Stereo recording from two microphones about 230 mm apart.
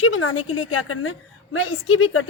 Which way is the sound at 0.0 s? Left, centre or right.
Left.